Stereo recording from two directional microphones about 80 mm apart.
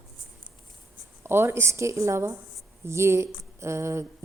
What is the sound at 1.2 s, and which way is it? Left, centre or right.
Speech, right.